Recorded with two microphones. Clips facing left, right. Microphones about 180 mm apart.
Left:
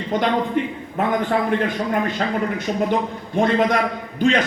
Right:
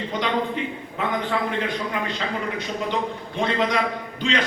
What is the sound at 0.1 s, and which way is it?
A man's voice, 50° left (ahead or behind).